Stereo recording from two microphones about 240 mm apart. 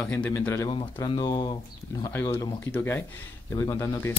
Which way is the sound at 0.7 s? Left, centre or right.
Left.